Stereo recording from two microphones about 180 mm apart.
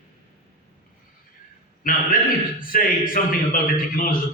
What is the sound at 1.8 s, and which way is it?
A man's voice, 50° left (ahead or behind).